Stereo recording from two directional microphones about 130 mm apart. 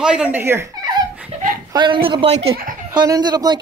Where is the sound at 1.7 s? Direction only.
35° right (ahead or behind).